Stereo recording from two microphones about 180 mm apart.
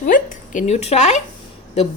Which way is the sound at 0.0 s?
45° left (ahead or behind).